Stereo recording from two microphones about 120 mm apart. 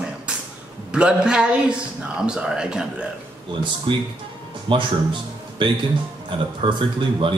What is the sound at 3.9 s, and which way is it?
A man's voice, 45° right (ahead or behind).